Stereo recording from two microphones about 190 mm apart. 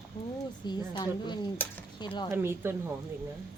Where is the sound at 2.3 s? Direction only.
15° right (ahead or behind).